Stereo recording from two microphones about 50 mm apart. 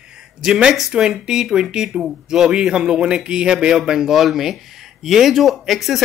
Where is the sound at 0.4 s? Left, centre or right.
Centre.